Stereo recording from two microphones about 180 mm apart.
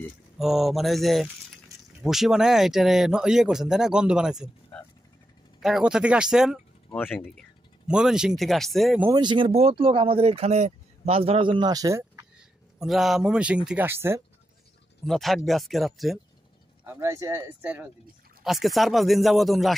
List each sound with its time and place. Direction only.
0.4 s speech: centre (ahead or behind)
5.6 s speech: 5° right (ahead or behind)
6.9 s speech: 10° left (ahead or behind)
9.0 s speech: 25° right (ahead or behind)
12.4 s speech: centre (ahead or behind)
15.0 s speech: centre (ahead or behind)
16.8 s speech: 15° right (ahead or behind)